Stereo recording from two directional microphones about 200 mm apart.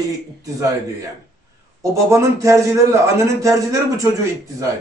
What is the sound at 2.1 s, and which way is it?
A man's voice, 15° right (ahead or behind).